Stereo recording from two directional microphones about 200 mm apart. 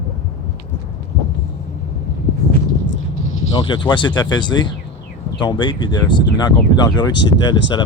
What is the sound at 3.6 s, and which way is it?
A man's voice, 25° left (ahead or behind).